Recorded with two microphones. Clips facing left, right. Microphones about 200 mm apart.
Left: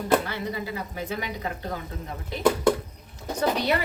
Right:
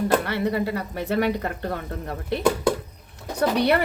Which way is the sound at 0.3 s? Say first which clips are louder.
Right 7 dB; 65° right (ahead or behind).